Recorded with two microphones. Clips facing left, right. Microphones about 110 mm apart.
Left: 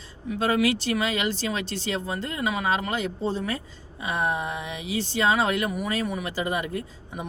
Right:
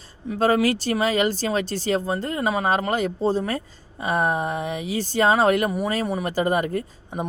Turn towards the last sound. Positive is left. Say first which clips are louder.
# right 5 dB
turn(degrees=-45)  # may be behind; listen again after turning